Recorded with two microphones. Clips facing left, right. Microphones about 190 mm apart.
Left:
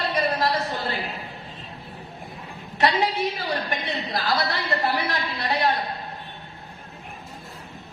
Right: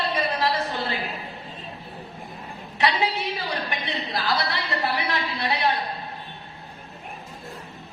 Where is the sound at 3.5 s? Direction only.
45° left (ahead or behind).